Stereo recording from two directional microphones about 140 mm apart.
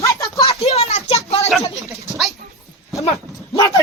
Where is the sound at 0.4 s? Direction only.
50° left (ahead or behind).